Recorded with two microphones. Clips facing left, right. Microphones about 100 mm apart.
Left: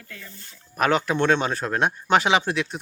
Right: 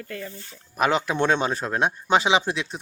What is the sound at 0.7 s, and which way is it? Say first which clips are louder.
Speech: left 1 dB; 10° right (ahead or behind).